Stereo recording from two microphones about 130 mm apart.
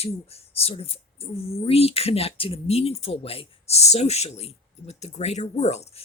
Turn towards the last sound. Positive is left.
turn(degrees=55)  # may be behind; listen again after turning